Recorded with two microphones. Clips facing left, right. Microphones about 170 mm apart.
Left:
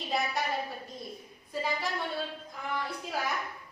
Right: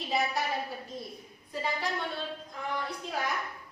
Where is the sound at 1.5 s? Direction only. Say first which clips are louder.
Left 1 dB; centre (ahead or behind).